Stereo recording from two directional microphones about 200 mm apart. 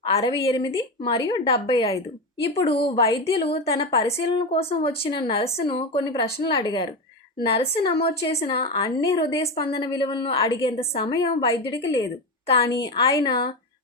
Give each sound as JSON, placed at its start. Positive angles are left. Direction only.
{"t": 0.0, "sound": "a woman's voice", "side_deg": 25}